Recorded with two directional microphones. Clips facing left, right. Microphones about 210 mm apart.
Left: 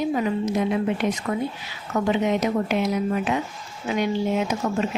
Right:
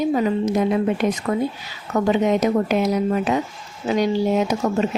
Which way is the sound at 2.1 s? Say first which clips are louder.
Right 5 dB; 40° right (ahead or behind).